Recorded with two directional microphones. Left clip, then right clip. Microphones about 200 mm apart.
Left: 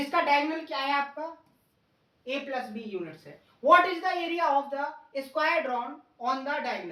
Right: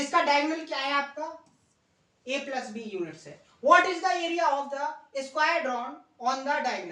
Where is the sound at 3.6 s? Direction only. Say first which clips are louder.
Even; 10° right (ahead or behind).